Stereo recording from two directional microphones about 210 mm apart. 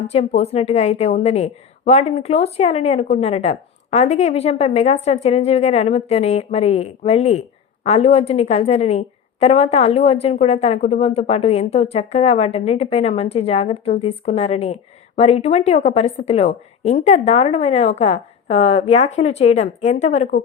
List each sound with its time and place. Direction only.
0.1 s a woman's voice: 30° left (ahead or behind)